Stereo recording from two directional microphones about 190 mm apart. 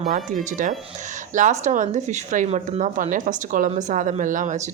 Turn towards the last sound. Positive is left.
turn(degrees=-40)  # may be behind; listen again after turning